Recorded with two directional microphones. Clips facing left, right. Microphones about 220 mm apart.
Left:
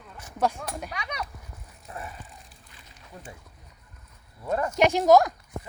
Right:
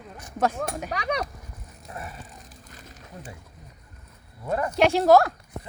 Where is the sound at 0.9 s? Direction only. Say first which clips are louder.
Right 8 dB; 45° right (ahead or behind).